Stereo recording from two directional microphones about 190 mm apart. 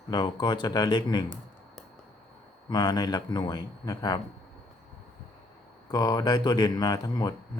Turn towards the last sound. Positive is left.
turn(degrees=20)  # may be behind; listen again after turning